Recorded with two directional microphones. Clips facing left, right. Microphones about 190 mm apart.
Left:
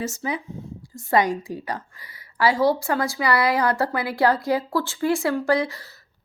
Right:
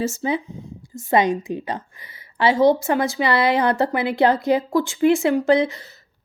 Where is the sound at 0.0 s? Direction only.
25° right (ahead or behind).